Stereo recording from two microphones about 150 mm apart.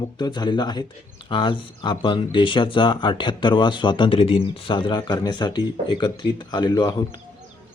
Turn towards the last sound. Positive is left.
turn(degrees=30)  # may be behind; listen again after turning